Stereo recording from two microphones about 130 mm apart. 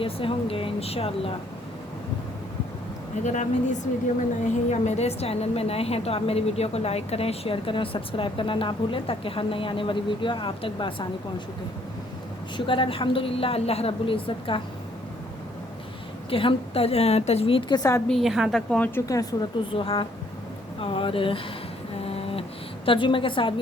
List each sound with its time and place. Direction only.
0.0 s a woman's voice: 45° left (ahead or behind)
3.2 s speech: 70° left (ahead or behind)
4.7 s a woman's voice: 60° left (ahead or behind); by 11.0 s 40° left (ahead or behind)
12.5 s a woman's voice: 40° left (ahead or behind)
16.3 s a woman's voice: 45° left (ahead or behind)
17.7 s speech: 25° left (ahead or behind)
18.1 s a woman's voice: centre (ahead or behind)
18.7 s a woman's voice: 10° left (ahead or behind)
19.0 s speech: 25° left (ahead or behind)
19.7 s a woman's voice: 45° left (ahead or behind)
22.0 s a sound: 50° left (ahead or behind)
22.9 s a woman's voice: 40° left (ahead or behind)